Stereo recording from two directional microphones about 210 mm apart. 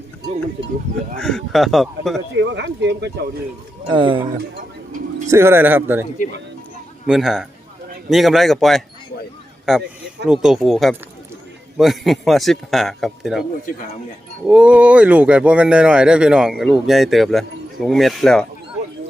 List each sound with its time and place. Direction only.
1.2 s speech: centre (ahead or behind)
2.4 s speech: 55° right (ahead or behind)
3.8 s speech: 25° right (ahead or behind)
5.3 s speech: 10° right (ahead or behind)
7.1 s speech: 5° right (ahead or behind)
14.4 s speech: 5° right (ahead or behind)